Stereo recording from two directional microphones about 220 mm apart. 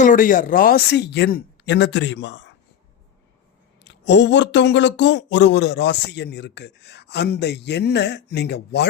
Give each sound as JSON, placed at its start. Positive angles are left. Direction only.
{"t": 0.0, "sound": "speech", "side_deg": 35}
{"t": 3.8, "sound": "speech", "side_deg": 55}